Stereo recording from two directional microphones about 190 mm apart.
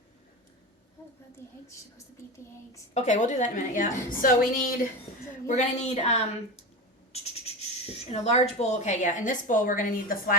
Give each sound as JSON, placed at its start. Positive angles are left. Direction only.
{"t": 1.4, "sound": "a woman's voice", "side_deg": 15}
{"t": 2.9, "sound": "a woman's voice", "side_deg": 40}